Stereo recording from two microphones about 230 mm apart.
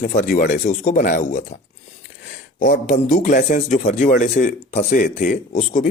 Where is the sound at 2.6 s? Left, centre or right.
Left.